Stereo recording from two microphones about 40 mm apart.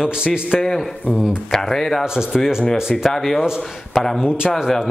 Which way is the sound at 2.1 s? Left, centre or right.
Centre.